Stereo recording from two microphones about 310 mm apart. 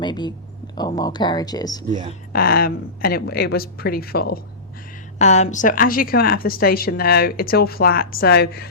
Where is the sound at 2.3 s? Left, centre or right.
Left.